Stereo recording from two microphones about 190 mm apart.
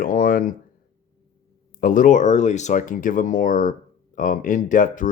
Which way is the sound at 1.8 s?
45° left (ahead or behind).